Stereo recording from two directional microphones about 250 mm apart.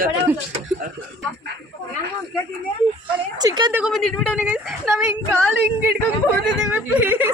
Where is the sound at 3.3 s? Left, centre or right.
Centre.